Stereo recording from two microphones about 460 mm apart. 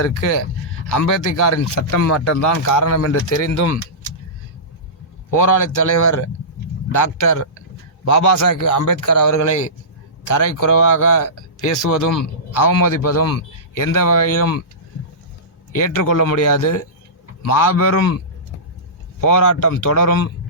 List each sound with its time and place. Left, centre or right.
0.2 s speech: left
5.3 s speech: left
12.6 s a man's voice: left
15.7 s a man's voice: left
19.2 s speech: left